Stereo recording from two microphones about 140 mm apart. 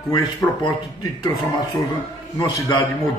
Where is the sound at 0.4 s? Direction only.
15° left (ahead or behind).